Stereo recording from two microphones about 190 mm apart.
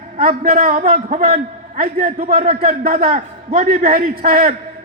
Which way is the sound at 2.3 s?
40° right (ahead or behind).